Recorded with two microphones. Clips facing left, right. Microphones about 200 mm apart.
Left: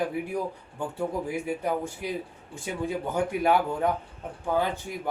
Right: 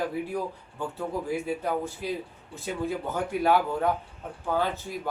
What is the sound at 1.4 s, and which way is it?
A man's voice, 15° left (ahead or behind).